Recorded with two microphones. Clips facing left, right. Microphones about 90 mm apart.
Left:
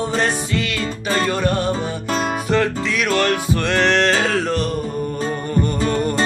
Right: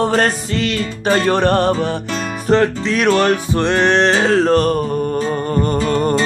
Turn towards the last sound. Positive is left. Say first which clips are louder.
# right 3 dB
turn(degrees=-40)  # may be behind; listen again after turning